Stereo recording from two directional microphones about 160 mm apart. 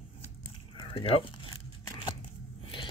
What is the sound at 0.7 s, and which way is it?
Speech, 30° left (ahead or behind).